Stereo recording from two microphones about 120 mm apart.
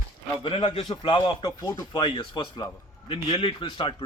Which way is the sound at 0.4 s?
50° left (ahead or behind).